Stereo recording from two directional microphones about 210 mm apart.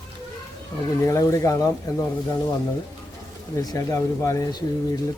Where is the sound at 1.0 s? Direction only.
15° left (ahead or behind).